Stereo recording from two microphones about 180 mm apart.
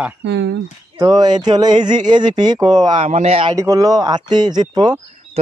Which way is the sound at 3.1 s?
35° right (ahead or behind).